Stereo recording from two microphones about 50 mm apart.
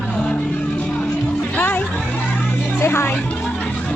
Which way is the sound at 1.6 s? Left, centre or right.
Left.